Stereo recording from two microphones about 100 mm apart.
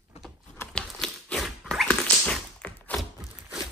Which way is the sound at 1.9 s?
15° left (ahead or behind).